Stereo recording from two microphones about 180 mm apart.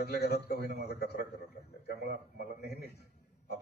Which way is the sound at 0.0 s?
65° left (ahead or behind).